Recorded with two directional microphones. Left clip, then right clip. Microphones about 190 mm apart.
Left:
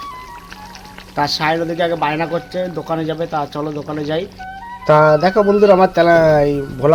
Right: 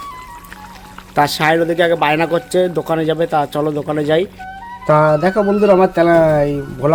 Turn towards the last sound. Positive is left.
turn(degrees=0)  # may be behind; listen again after turning